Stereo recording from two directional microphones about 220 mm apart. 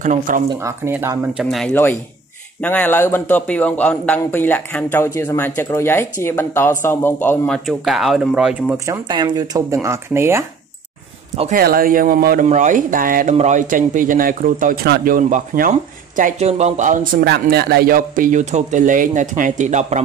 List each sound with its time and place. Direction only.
0.0 s speech: 35° right (ahead or behind)
0.7 s speech: 10° right (ahead or behind)
1.4 s a man's voice: centre (ahead or behind)
11.3 s speech: 35° right (ahead or behind)